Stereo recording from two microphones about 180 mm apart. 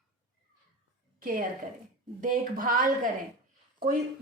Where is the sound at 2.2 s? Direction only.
50° right (ahead or behind).